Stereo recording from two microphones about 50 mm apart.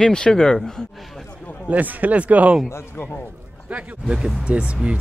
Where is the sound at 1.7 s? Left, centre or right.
Right.